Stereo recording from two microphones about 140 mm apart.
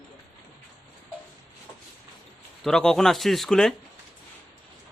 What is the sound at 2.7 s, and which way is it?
Speech, 5° left (ahead or behind).